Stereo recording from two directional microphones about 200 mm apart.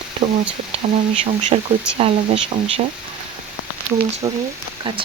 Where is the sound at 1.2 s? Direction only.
30° right (ahead or behind).